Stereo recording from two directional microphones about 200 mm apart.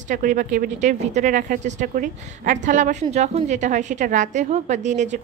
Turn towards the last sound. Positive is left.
turn(degrees=-35)  # may be behind; listen again after turning